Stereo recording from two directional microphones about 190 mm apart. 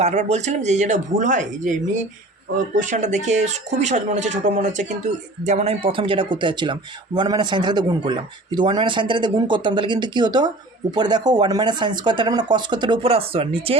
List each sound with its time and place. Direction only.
0.0 s speech: 35° right (ahead or behind)